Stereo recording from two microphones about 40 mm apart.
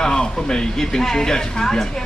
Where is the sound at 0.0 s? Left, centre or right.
Centre.